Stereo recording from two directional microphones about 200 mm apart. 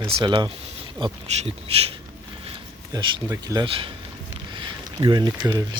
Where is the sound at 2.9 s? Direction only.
20° right (ahead or behind).